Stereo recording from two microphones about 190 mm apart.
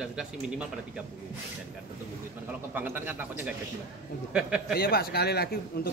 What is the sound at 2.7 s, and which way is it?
Speech, 10° right (ahead or behind).